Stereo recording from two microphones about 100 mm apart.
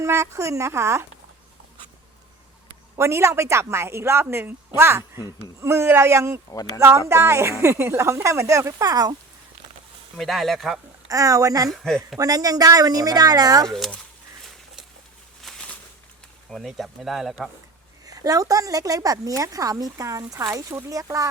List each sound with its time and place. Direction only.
0.0 s a woman's voice: 30° right (ahead or behind)
3.0 s a woman's voice: 30° right (ahead or behind)
10.2 s speech: centre (ahead or behind)
11.1 s a woman's voice: 35° right (ahead or behind)
11.7 s speech: centre (ahead or behind)
12.2 s a woman's voice: 40° right (ahead or behind)
13.7 s speech: 5° left (ahead or behind)
15.4 s a sound: centre (ahead or behind)
16.5 s speech: centre (ahead or behind)
18.0 s a woman's voice: 35° right (ahead or behind)